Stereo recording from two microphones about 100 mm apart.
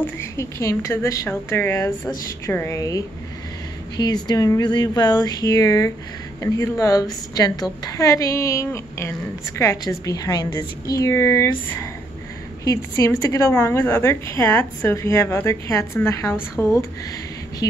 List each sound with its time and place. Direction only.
0.0 s a woman's voice: 30° left (ahead or behind)
3.9 s a woman's voice: 45° left (ahead or behind); by 16.8 s 30° left (ahead or behind)